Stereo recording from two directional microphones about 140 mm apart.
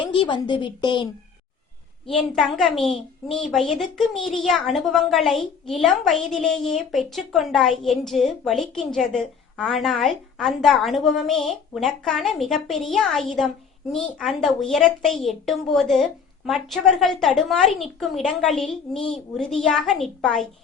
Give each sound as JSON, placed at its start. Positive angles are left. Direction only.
{"t": 0.0, "sound": "a woman's voice", "side_deg": 35}
{"t": 2.0, "sound": "a woman's voice", "side_deg": 0}